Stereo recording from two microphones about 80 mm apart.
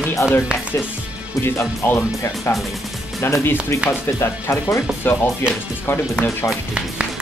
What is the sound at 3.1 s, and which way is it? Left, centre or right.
Speech, left.